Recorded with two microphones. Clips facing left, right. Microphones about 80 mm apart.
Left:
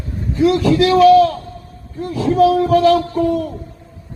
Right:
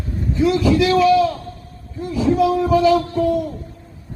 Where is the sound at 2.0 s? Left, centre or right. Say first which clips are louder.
Left 3 dB; left.